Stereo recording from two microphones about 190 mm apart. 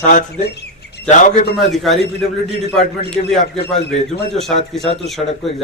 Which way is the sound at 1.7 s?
Centre (ahead or behind).